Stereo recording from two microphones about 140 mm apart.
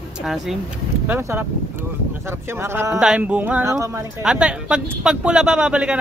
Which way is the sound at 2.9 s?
5° right (ahead or behind).